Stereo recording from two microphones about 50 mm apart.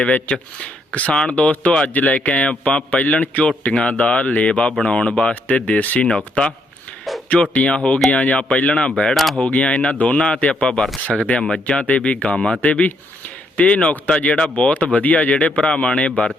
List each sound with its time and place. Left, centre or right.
0.0 s a man's voice: left
1.4 s a man's voice: left
5.5 s speech: left
6.1 s a man's voice: left
7.5 s a man's voice: left
9.1 s speech: centre
9.4 s a man's voice: left